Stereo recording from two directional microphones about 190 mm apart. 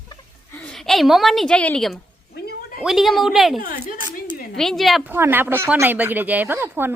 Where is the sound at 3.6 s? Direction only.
50° left (ahead or behind).